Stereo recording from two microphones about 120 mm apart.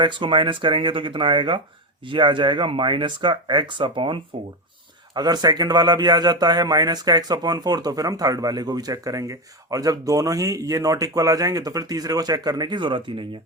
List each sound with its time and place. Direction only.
0.0 s a man's voice: 40° right (ahead or behind)